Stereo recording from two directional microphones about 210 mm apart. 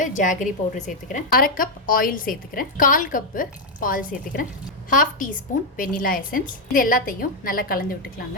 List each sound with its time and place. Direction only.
0.0 s a woman's voice: 35° left (ahead or behind)